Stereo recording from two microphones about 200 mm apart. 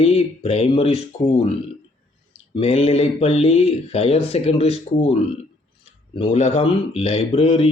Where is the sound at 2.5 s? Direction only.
30° left (ahead or behind).